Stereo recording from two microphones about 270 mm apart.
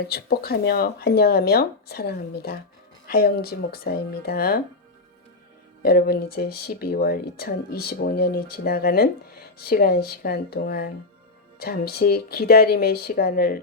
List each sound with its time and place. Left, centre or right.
0.1 s speech: left
5.8 s speech: left